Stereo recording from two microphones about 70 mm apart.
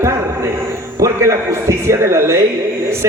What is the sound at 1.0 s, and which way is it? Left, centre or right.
A man's voice, right.